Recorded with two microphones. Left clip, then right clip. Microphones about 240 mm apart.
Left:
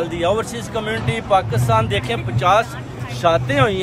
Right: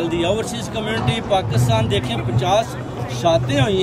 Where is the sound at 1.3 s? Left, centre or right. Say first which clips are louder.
Left 4 dB; centre.